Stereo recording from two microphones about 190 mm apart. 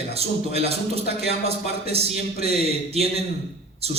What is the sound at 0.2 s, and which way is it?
A man's voice, 30° right (ahead or behind).